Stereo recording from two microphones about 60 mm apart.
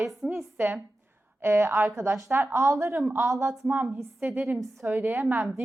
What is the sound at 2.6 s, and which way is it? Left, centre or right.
Speech, right.